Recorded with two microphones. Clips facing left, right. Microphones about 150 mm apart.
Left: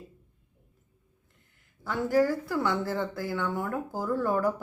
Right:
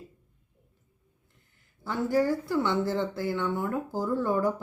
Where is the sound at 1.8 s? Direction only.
25° right (ahead or behind).